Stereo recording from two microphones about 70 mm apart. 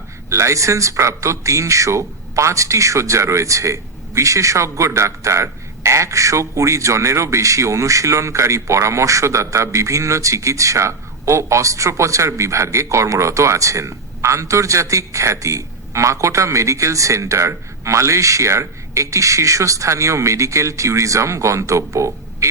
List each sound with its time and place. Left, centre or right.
0.3 s speech: right